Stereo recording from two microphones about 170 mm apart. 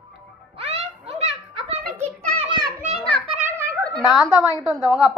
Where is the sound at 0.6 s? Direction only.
35° right (ahead or behind).